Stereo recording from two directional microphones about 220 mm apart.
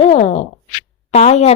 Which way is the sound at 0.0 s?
30° left (ahead or behind).